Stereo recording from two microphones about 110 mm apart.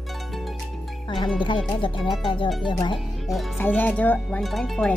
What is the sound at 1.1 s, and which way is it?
Speech, 45° left (ahead or behind).